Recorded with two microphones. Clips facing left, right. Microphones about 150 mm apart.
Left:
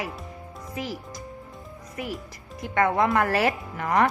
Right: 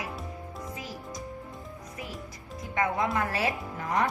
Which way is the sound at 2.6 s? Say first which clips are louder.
Left 6 dB; 70° left (ahead or behind).